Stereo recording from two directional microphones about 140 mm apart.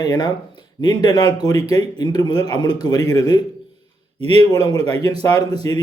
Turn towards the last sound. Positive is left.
turn(degrees=30)  # may be behind; listen again after turning